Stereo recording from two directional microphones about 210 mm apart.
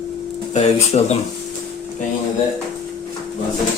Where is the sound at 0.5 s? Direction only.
30° left (ahead or behind).